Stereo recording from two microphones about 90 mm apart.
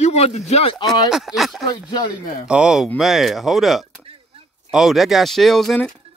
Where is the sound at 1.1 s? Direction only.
5° right (ahead or behind).